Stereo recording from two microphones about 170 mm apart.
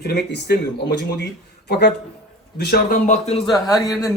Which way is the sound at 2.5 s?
65° left (ahead or behind).